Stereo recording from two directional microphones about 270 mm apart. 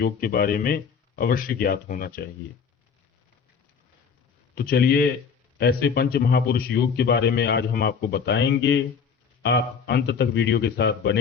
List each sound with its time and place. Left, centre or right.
0.0 s a man's voice: left
4.5 s a man's voice: left